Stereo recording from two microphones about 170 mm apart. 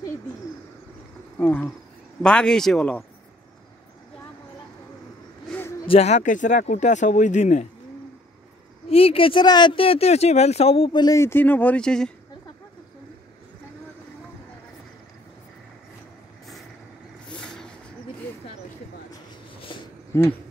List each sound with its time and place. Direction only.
1.4 s a man's voice: 10° left (ahead or behind)
5.9 s speech: 40° left (ahead or behind)
8.8 s speech: 35° left (ahead or behind); by 12.1 s 5° left (ahead or behind)
17.3 s vehicle: 5° left (ahead or behind)
19.7 s a sound: 30° left (ahead or behind)